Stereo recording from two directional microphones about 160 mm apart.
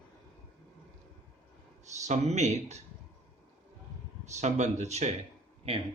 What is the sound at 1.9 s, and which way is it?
Speech, 45° right (ahead or behind).